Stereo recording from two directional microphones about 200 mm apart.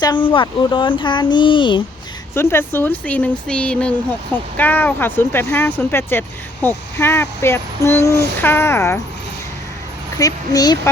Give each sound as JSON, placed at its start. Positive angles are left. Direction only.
{"t": 0.0, "sound": "speech", "side_deg": 25}
{"t": 2.3, "sound": "speech", "side_deg": 10}
{"t": 10.2, "sound": "speech", "side_deg": 20}